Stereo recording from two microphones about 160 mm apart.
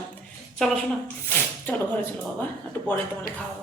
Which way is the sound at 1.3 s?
10° left (ahead or behind).